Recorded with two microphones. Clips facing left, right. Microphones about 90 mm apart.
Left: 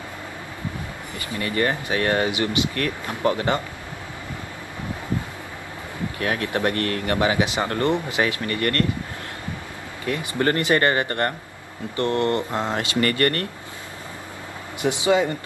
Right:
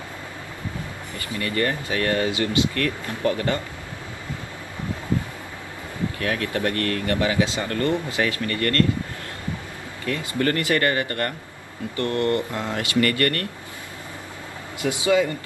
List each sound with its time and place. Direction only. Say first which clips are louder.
1.1 s speech: left 1 dB; 20° left (ahead or behind)
6.1 s speech: left 2 dB; 25° left (ahead or behind)
10.4 s speech: left 2 dB; 25° left (ahead or behind)
14.8 s speech: left 1 dB; 25° left (ahead or behind)